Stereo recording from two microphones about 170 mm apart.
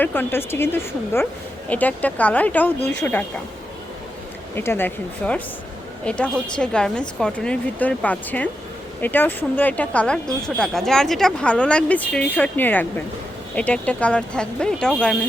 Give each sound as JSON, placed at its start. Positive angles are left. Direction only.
{"t": 0.0, "sound": "a woman's voice", "side_deg": 10}
{"t": 4.5, "sound": "a woman's voice", "side_deg": 15}